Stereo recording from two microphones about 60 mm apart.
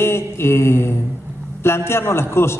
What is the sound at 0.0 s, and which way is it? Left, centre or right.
A man's voice, left.